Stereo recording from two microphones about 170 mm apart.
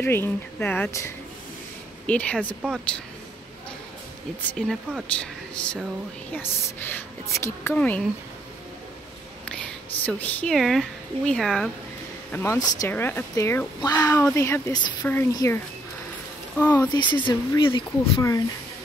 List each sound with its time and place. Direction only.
0.0 s speech: 10° left (ahead or behind)
4.6 s speech: 5° left (ahead or behind)
10.0 s speech: 10° left (ahead or behind)
12.3 s speech: 15° left (ahead or behind)
16.9 s speech: 25° left (ahead or behind)